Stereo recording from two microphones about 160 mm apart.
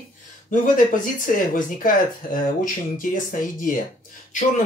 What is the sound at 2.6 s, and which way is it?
Speech, 60° left (ahead or behind).